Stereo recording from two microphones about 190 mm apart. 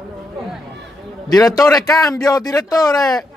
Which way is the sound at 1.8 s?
20° left (ahead or behind).